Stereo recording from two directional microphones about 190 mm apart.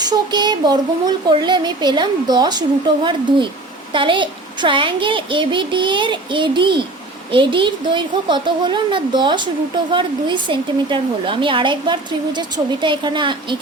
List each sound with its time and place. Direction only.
0.1 s a woman's voice: 25° right (ahead or behind)